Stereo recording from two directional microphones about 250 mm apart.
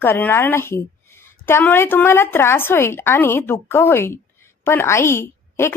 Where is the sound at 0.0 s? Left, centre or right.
Centre.